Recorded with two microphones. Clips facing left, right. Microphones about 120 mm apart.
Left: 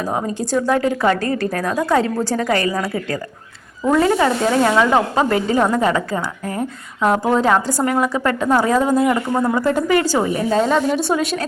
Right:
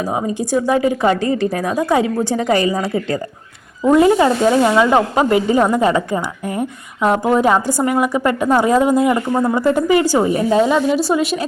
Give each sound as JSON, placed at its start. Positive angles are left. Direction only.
{"t": 0.0, "sound": "a woman's voice", "side_deg": -10}
{"t": 3.8, "sound": "a woman's voice", "side_deg": -15}